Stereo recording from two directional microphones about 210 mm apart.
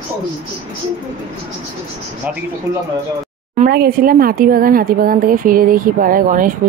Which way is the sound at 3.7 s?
45° right (ahead or behind).